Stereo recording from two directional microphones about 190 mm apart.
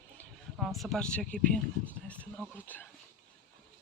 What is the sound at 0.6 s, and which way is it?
Speech, centre (ahead or behind).